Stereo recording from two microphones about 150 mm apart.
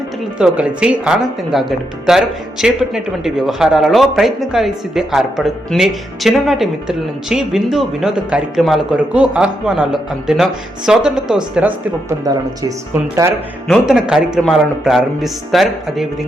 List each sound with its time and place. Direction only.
0.3 s speech: 5° right (ahead or behind)
12.0 s speech: 25° right (ahead or behind)
13.7 s speech: 5° right (ahead or behind)